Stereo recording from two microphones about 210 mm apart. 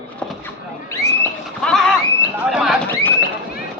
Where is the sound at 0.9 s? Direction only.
15° left (ahead or behind).